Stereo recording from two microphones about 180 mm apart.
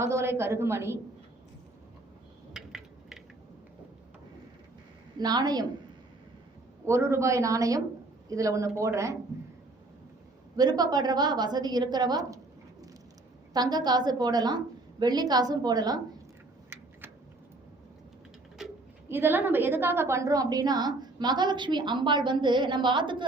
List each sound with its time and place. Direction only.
0.0 s speech: 15° right (ahead or behind)
2.5 s a sound: centre (ahead or behind)
5.1 s a woman's voice: 20° right (ahead or behind)
6.8 s speech: 15° right (ahead or behind)
10.6 s a woman's voice: 20° right (ahead or behind)
13.5 s a woman's voice: 20° right (ahead or behind)
18.6 s pigeon: centre (ahead or behind)
19.0 s a woman's voice: 10° right (ahead or behind)